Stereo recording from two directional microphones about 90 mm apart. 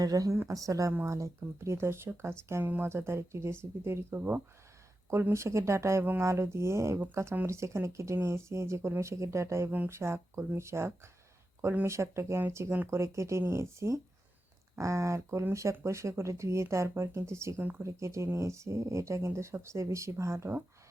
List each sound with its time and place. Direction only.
0.0 s a woman's voice: 45° right (ahead or behind); by 17.8 s 20° right (ahead or behind)
17.8 s speech: 35° right (ahead or behind)